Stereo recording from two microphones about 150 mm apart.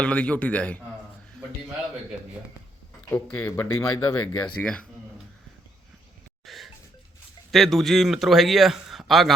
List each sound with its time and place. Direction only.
0.0 s speech: 10° left (ahead or behind)
3.1 s speech: 10° left (ahead or behind)
4.6 s speech: 5° left (ahead or behind)
6.4 s a sound: centre (ahead or behind)
7.5 s a man's voice: centre (ahead or behind)